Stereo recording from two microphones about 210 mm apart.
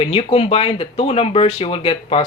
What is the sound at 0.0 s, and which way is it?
Speech, 25° left (ahead or behind).